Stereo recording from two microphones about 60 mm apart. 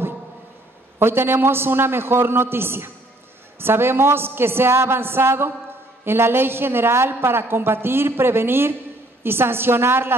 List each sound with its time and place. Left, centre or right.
0.9 s a woman's voice: right